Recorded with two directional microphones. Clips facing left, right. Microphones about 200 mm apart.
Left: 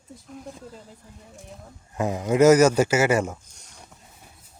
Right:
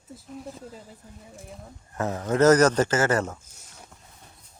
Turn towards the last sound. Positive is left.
turn(degrees=10)  # may be behind; listen again after turning